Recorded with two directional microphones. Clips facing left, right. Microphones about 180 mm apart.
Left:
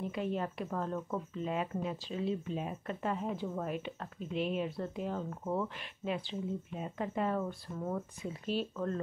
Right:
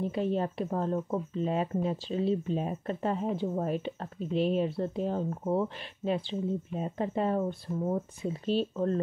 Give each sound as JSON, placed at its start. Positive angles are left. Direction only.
{"t": 0.0, "sound": "speech", "side_deg": -35}